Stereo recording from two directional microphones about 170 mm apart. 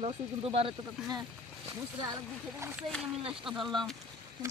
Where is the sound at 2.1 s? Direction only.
15° right (ahead or behind).